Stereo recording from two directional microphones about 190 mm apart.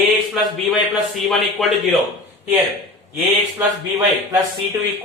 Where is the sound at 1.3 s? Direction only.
Centre (ahead or behind).